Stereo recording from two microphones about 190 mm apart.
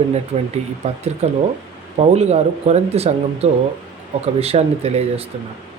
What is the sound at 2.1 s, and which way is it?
Speech, 35° right (ahead or behind).